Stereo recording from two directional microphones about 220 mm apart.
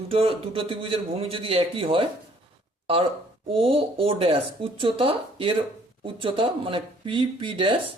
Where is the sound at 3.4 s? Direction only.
25° right (ahead or behind).